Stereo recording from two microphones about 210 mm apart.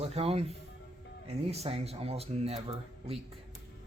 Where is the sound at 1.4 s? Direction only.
30° right (ahead or behind).